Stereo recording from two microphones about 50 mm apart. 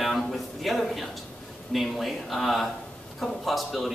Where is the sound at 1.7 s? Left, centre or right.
Centre.